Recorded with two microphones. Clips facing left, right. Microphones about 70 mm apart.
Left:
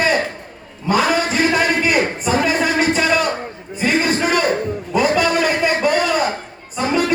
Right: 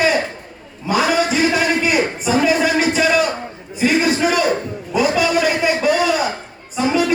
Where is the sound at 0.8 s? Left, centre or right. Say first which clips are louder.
Even; left.